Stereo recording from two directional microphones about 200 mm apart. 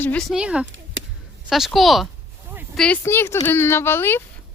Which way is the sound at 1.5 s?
Centre (ahead or behind).